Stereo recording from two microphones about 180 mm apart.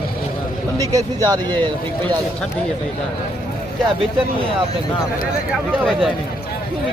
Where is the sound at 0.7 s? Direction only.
20° right (ahead or behind).